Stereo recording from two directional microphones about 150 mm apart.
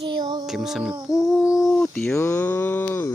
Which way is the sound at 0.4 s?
5° right (ahead or behind).